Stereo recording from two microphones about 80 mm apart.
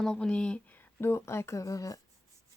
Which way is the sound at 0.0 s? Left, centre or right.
Centre.